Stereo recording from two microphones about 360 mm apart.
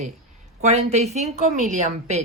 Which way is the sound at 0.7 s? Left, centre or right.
Centre.